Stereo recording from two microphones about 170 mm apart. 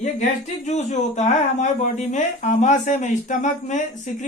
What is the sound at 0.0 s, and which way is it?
Speech, 45° left (ahead or behind).